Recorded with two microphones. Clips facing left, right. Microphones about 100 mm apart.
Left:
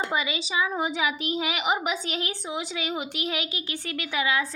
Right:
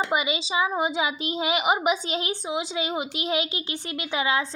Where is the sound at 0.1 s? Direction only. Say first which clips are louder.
Right 3 dB; 20° right (ahead or behind).